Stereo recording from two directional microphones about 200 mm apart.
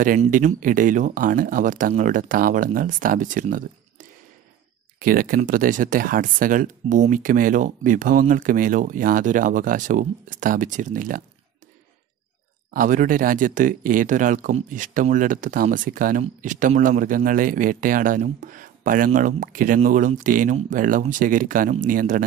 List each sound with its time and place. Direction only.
0.0 s speech: 40° right (ahead or behind)
12.7 s speech: 40° right (ahead or behind)